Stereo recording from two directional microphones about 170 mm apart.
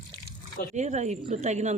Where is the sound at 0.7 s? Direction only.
45° right (ahead or behind).